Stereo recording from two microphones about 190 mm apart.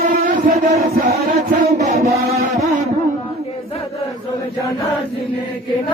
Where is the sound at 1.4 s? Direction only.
40° right (ahead or behind).